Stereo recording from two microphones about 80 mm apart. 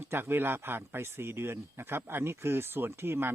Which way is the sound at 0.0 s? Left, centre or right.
Right.